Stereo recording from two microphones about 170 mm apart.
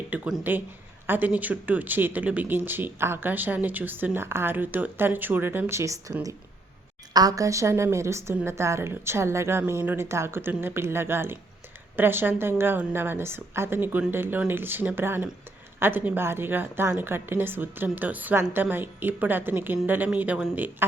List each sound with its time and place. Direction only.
0.1 s speech: 5° right (ahead or behind)